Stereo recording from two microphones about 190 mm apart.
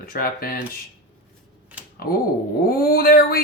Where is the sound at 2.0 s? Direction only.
55° left (ahead or behind).